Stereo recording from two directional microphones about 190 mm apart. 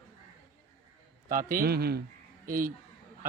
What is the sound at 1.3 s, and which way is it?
Speech, 45° right (ahead or behind).